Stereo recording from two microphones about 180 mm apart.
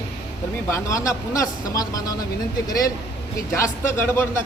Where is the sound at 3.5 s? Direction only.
15° left (ahead or behind).